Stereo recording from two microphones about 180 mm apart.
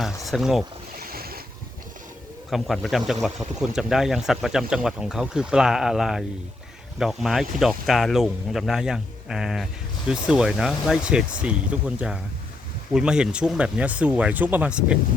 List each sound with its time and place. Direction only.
0.3 s speech: centre (ahead or behind)
1.0 s boat: 55° right (ahead or behind)
2.5 s speech: centre (ahead or behind)